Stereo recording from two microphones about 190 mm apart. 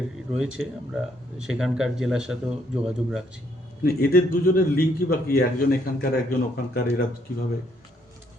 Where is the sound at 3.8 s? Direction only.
50° left (ahead or behind).